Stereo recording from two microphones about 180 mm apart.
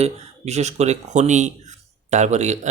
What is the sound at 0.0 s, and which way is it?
Speech, 40° right (ahead or behind).